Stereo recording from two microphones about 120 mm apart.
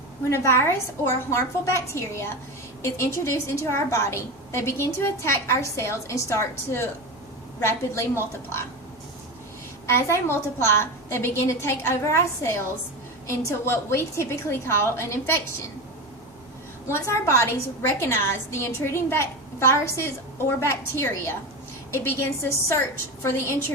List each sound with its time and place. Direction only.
0.3 s a woman's voice: 20° left (ahead or behind)
9.8 s a woman's voice: 20° left (ahead or behind)
16.9 s a woman's voice: 25° left (ahead or behind)